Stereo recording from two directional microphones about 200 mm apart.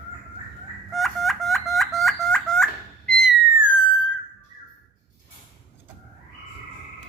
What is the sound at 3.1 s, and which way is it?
Whistle, centre (ahead or behind).